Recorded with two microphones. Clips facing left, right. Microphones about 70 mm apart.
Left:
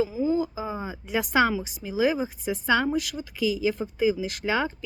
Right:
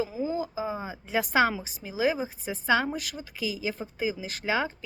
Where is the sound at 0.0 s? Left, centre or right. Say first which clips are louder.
Left 5 dB; right.